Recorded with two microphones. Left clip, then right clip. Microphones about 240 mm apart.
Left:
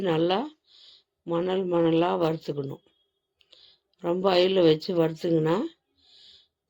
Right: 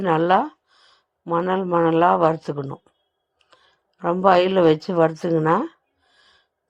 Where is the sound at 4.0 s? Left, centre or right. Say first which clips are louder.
Right 6 dB; centre.